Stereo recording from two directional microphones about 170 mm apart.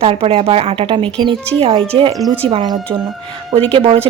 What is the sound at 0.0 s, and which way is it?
Speech, 35° right (ahead or behind).